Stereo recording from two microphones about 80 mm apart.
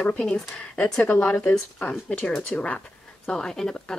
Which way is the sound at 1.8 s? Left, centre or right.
Centre.